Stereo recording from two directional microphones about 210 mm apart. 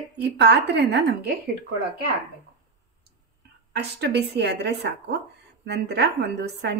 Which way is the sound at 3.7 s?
50° right (ahead or behind).